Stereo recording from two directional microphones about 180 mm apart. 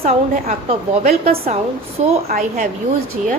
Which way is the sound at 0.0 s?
35° right (ahead or behind).